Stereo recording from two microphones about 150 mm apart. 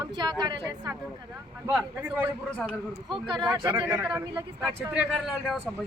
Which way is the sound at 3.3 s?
25° right (ahead or behind).